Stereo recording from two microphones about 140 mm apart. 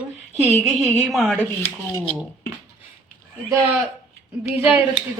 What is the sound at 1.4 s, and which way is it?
Speech, 20° left (ahead or behind).